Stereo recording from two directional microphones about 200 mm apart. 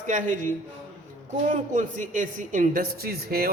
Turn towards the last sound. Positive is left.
turn(degrees=-50)  # may be behind; listen again after turning